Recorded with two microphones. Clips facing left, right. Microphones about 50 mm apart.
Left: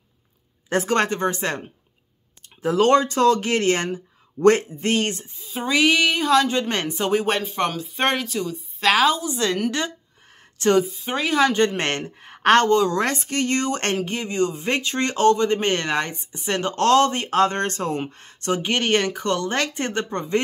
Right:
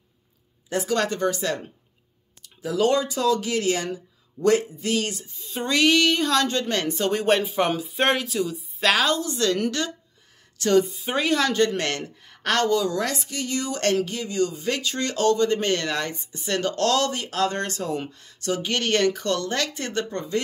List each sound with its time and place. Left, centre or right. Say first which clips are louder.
0.7 s speech: left 4 dB; left
0.9 s speech: even; left
5.4 s a woman's voice: left 1 dB; centre; by 7.1 s left
7.1 s speech: even; centre; by 9.9 s left
10.8 s speech: even; centre
11.5 s speech: left 2 dB; left